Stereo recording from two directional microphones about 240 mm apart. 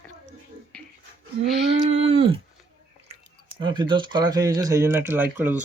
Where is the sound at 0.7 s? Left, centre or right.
Centre.